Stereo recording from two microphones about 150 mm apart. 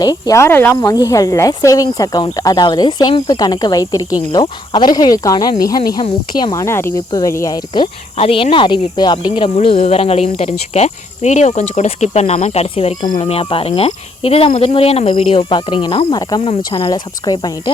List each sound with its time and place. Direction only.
0.0 s cricket: 25° left (ahead or behind)
9.6 s insect: 40° left (ahead or behind)
13.0 s cricket: 30° left (ahead or behind)
13.2 s insect: 40° left (ahead or behind)
16.1 s cricket: 25° left (ahead or behind)